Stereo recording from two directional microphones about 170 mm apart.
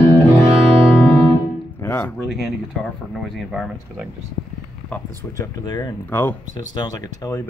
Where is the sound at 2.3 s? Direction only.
Centre (ahead or behind).